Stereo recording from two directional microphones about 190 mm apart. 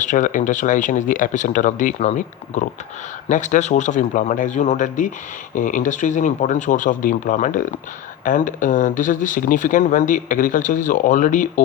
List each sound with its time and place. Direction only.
0.0 s a man's voice: 40° left (ahead or behind)